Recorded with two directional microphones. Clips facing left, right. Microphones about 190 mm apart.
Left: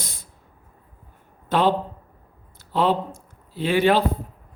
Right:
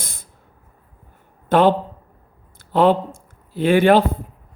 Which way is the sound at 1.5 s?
50° right (ahead or behind).